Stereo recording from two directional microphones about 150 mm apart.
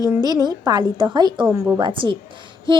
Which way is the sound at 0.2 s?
25° right (ahead or behind).